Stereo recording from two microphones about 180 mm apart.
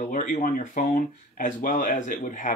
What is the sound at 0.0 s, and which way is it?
Speech, 45° left (ahead or behind).